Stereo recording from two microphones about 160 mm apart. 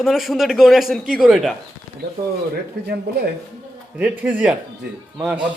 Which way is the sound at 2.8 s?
90° right.